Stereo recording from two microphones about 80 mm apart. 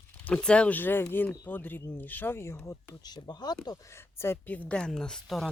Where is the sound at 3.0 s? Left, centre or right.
Left.